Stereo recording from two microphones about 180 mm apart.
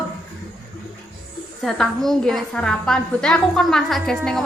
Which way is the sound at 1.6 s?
Centre (ahead or behind).